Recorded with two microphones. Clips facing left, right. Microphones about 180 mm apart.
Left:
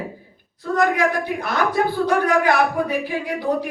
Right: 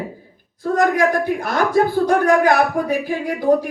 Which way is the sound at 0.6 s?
45° right (ahead or behind).